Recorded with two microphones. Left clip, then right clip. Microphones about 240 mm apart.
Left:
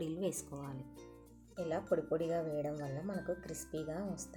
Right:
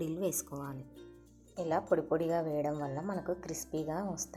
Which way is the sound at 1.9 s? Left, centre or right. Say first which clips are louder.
Right 2 dB; centre.